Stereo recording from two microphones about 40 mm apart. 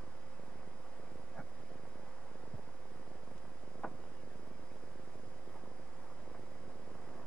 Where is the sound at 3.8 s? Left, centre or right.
Centre.